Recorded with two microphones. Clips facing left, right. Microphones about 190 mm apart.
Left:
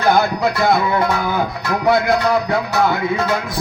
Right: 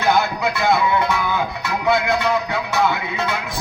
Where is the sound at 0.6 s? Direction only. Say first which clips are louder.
Left 1 dB; 40° left (ahead or behind).